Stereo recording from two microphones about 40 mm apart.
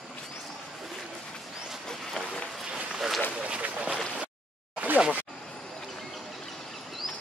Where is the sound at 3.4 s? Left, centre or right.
Right.